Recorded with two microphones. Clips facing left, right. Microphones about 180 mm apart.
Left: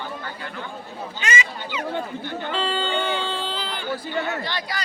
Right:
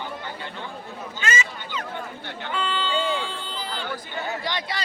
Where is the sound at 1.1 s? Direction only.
15° left (ahead or behind).